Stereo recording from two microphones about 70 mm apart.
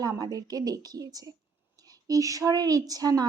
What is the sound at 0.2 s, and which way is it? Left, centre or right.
A woman's voice, right.